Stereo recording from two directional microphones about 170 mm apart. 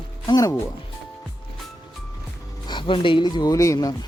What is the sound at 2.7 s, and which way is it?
Speech, 30° left (ahead or behind).